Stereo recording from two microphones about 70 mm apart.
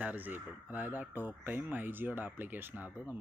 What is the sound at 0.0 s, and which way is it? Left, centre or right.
Speech, right.